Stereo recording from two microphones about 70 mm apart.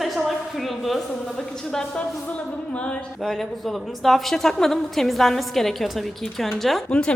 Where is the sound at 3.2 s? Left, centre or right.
Centre.